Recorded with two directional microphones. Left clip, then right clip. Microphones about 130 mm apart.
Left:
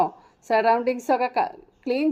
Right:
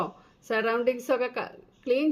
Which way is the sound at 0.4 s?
35° left (ahead or behind).